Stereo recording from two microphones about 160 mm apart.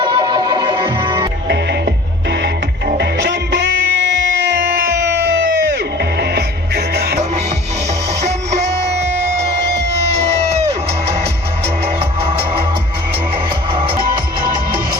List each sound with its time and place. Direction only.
0.0 s music: 30° right (ahead or behind)
2.3 s music: 90° right
8.2 s music: 45° right (ahead or behind)
10.2 s music: 40° right (ahead or behind)
11.9 s music: 35° right (ahead or behind)